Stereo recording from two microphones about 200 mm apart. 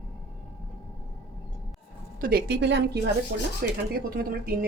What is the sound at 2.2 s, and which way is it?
A woman's voice, 50° right (ahead or behind).